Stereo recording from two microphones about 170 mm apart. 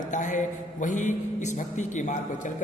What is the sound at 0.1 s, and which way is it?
A man's voice, 45° left (ahead or behind).